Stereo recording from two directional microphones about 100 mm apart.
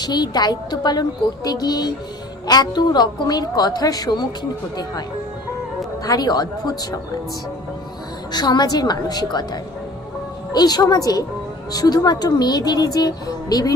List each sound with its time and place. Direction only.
0.0 s a woman's voice: 45° left (ahead or behind)
6.0 s speech: 40° left (ahead or behind)
8.3 s a woman's voice: 45° left (ahead or behind)